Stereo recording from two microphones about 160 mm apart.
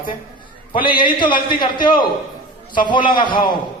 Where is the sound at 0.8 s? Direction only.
30° left (ahead or behind).